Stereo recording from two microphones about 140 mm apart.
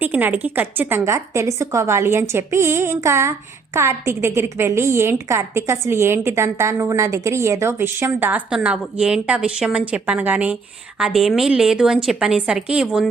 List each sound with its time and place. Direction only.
0.0 s a woman's voice: 15° right (ahead or behind)